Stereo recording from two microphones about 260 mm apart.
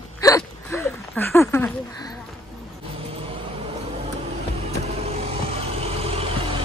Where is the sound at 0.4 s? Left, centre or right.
Centre.